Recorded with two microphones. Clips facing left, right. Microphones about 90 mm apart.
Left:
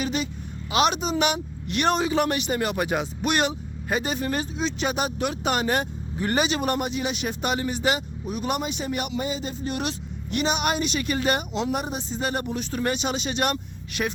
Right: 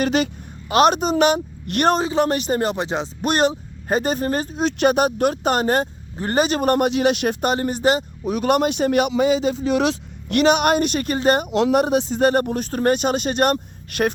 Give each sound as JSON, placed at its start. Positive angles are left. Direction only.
{"t": 0.0, "sound": "speech", "side_deg": -70}
{"t": 0.7, "sound": "speech", "side_deg": -45}
{"t": 3.2, "sound": "speech", "side_deg": -40}
{"t": 4.6, "sound": "speech", "side_deg": -55}
{"t": 6.8, "sound": "speech", "side_deg": -65}
{"t": 7.4, "sound": "speech", "side_deg": -45}
{"t": 8.3, "sound": "speech", "side_deg": -65}
{"t": 11.5, "sound": "speech", "side_deg": -70}